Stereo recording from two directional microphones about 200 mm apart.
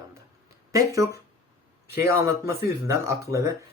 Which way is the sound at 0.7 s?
15° right (ahead or behind).